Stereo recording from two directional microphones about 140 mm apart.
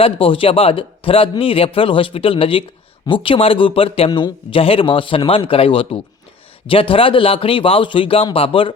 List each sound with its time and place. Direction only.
0.0 s speech: 40° left (ahead or behind)